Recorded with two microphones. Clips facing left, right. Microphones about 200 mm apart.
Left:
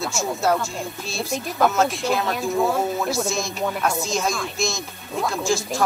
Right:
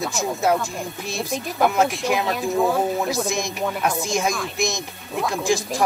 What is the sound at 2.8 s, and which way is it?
Speech, 15° right (ahead or behind).